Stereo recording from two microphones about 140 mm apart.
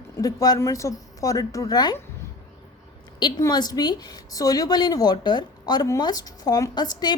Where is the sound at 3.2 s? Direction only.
25° left (ahead or behind).